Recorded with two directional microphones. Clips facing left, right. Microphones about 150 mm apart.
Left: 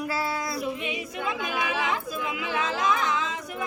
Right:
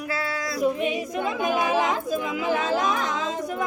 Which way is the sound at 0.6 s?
40° right (ahead or behind).